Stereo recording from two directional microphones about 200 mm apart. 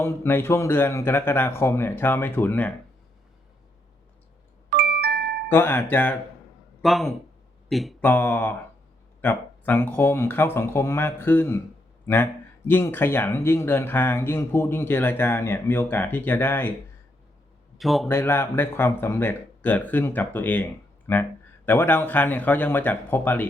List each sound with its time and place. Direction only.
0.0 s speech: 10° left (ahead or behind)
4.8 s music: 50° right (ahead or behind)
5.5 s speech: 10° left (ahead or behind)
8.1 s speech: 10° left (ahead or behind)
17.7 s a man's voice: centre (ahead or behind)
18.1 s speech: 10° left (ahead or behind)